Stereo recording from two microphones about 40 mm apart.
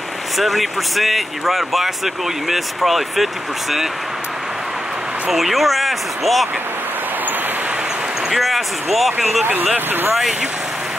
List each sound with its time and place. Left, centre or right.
0.4 s speech: centre
5.3 s speech: centre
8.3 s speech: centre
9.4 s speech: right